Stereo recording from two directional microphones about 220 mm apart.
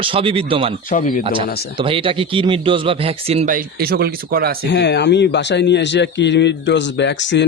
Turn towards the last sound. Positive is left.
turn(degrees=55)  # may be behind; listen again after turning